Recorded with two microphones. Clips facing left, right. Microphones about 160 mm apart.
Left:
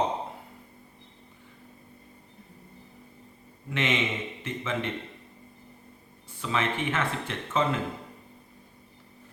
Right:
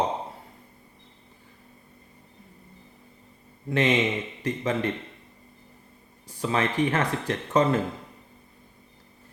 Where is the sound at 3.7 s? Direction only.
40° right (ahead or behind).